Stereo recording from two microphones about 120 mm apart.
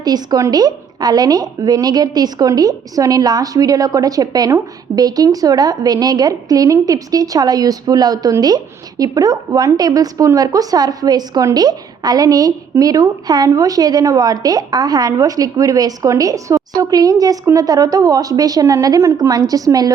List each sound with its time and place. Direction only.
0.0 s a woman's voice: 35° right (ahead or behind)